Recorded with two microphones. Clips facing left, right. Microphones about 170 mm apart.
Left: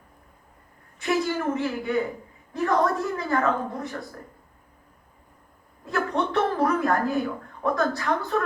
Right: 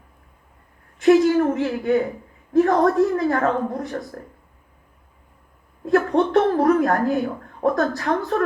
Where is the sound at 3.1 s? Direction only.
40° right (ahead or behind).